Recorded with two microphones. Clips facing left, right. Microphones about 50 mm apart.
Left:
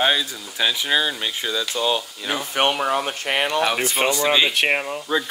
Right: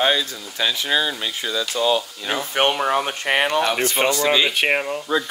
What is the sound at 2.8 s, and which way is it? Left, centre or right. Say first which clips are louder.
Speech: right 2 dB; right.